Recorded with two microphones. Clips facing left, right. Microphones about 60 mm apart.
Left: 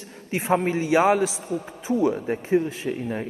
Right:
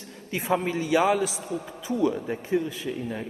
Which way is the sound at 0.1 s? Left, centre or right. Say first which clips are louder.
Left 3 dB; left.